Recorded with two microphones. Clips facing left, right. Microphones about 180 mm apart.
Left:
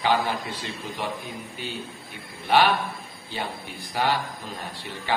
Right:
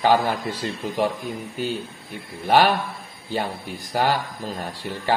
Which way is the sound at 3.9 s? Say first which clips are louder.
Right 4 dB; 45° right (ahead or behind).